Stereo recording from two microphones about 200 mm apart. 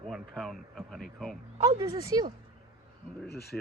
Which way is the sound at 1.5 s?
20° right (ahead or behind).